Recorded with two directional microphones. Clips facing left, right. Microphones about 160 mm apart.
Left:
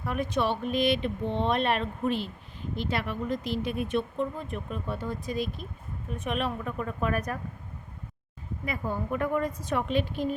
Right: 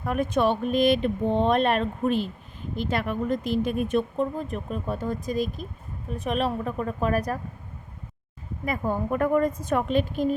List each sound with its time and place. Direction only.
0.0 s a woman's voice: 50° right (ahead or behind)
8.6 s speech: 45° right (ahead or behind)